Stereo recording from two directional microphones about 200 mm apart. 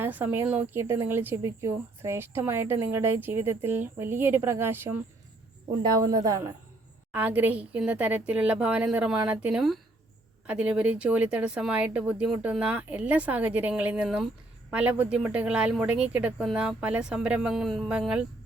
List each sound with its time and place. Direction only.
0.0 s a woman's voice: 10° right (ahead or behind)
6.1 s a woman's voice: 20° right (ahead or behind)